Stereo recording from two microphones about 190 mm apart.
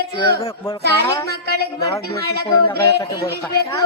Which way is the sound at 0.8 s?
60° right (ahead or behind).